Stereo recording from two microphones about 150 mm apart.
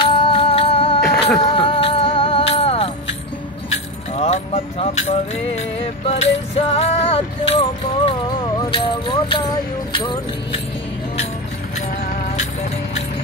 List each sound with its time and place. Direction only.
0.0 s humming: 35° left (ahead or behind)
1.0 s a sound: 5° left (ahead or behind)
1.5 s music: 35° left (ahead or behind)
4.1 s music: 45° left (ahead or behind)